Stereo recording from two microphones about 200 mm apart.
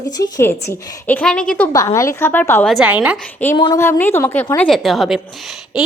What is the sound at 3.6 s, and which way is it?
A woman's voice, 15° left (ahead or behind).